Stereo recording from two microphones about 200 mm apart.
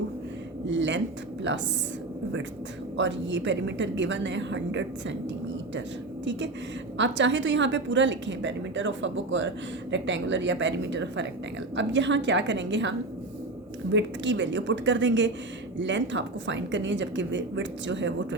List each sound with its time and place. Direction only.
0.7 s a woman's voice: 65° right (ahead or behind)
3.0 s a woman's voice: 65° right (ahead or behind)
6.9 s a woman's voice: 65° right (ahead or behind)
13.9 s a woman's voice: 65° right (ahead or behind)